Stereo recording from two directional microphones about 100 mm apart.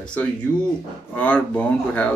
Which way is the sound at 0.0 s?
15° left (ahead or behind).